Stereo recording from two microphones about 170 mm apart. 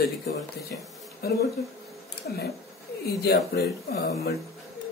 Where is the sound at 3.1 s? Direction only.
70° left (ahead or behind).